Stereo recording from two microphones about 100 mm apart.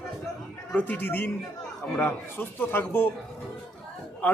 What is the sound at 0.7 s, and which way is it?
A man's voice, 15° left (ahead or behind).